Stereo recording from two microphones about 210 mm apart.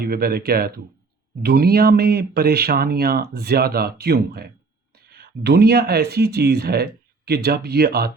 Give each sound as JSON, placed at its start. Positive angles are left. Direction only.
{"t": 0.0, "sound": "speech", "side_deg": -45}